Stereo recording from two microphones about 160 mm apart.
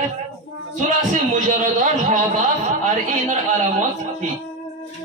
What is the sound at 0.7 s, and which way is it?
A man's voice, 55° right (ahead or behind).